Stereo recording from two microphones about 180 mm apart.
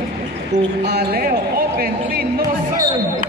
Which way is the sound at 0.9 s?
55° right (ahead or behind).